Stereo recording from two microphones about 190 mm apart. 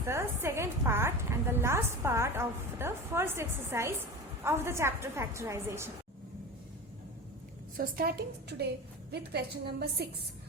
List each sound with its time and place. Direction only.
0.0 s a woman's voice: 15° right (ahead or behind)
7.8 s a woman's voice: 55° right (ahead or behind)